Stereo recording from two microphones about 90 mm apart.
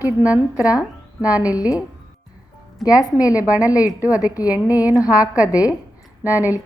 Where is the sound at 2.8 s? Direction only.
40° left (ahead or behind).